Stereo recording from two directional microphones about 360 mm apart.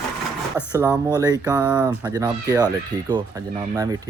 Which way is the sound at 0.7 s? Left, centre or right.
Centre.